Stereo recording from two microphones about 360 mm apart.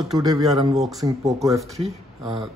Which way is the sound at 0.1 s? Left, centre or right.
Centre.